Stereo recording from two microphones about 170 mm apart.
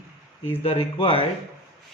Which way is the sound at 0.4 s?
35° left (ahead or behind).